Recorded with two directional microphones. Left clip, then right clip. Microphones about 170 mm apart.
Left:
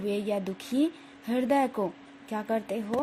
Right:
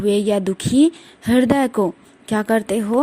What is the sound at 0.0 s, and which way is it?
Speech, 40° right (ahead or behind).